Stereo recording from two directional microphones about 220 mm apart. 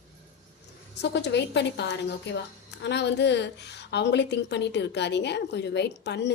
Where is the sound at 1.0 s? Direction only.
50° left (ahead or behind).